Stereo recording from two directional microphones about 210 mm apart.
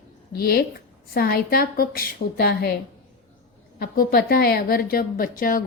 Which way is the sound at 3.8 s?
45° left (ahead or behind).